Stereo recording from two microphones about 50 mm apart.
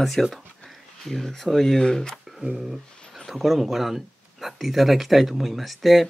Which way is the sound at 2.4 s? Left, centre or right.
Centre.